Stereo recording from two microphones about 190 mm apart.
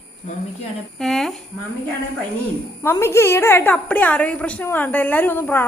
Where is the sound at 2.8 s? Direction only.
15° left (ahead or behind).